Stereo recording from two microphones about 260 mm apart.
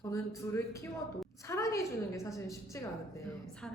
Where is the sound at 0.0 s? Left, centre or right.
Centre.